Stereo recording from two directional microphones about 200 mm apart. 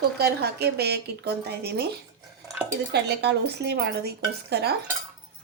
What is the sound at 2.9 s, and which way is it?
Speech, 55° right (ahead or behind).